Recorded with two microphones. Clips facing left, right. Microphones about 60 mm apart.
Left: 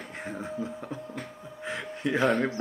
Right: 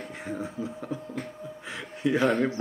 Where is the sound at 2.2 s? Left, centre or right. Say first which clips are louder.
Even; centre.